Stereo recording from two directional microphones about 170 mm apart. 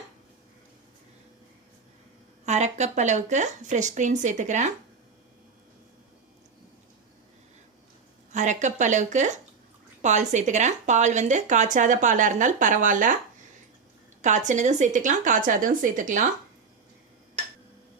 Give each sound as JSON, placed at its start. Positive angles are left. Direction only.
{"t": 2.5, "sound": "speech", "side_deg": -40}
{"t": 8.3, "sound": "speech", "side_deg": -45}
{"t": 14.2, "sound": "speech", "side_deg": -45}